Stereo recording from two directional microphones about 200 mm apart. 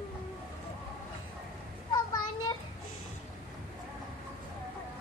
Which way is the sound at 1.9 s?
20° left (ahead or behind).